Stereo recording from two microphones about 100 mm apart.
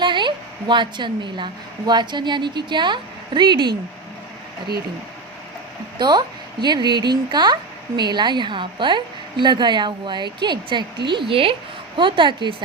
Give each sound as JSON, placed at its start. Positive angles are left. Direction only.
{"t": 0.0, "sound": "a sound", "side_deg": -50}
{"t": 1.9, "sound": "speech", "side_deg": -50}
{"t": 6.0, "sound": "speech", "side_deg": -45}